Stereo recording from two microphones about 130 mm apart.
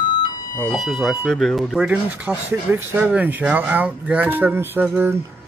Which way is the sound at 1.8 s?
10° right (ahead or behind).